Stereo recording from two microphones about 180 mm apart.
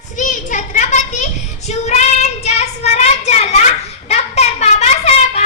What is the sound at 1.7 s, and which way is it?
Child singing, 40° left (ahead or behind).